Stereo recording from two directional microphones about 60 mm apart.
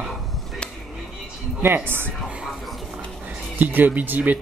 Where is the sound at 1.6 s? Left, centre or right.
Right.